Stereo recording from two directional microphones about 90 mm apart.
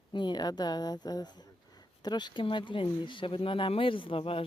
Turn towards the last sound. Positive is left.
turn(degrees=90)